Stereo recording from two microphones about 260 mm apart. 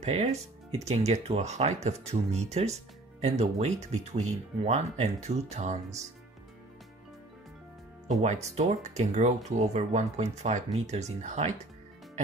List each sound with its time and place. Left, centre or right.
0.0 s speech: right
8.1 s speech: right